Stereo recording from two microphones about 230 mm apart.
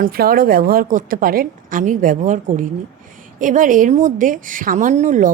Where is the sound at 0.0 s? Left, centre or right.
Right.